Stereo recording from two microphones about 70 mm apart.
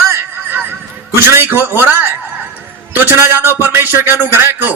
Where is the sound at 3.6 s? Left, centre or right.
Right.